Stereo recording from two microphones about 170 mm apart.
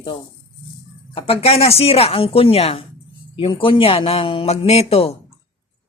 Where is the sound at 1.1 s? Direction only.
35° left (ahead or behind).